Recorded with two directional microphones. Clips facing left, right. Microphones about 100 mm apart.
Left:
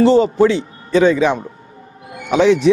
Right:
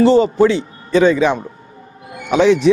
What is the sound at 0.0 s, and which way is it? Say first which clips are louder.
Speech: even; 15° right (ahead or behind).